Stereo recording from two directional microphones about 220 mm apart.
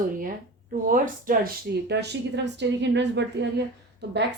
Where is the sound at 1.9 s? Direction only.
50° right (ahead or behind).